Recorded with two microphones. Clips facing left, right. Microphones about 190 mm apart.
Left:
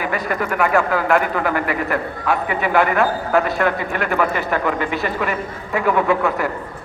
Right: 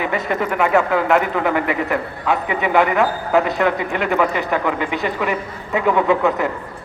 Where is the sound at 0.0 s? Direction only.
25° right (ahead or behind).